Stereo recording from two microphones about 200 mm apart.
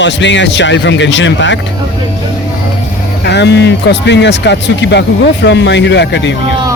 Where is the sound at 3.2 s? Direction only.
60° left (ahead or behind).